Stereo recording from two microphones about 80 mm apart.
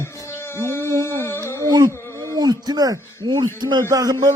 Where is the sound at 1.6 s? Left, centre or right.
Right.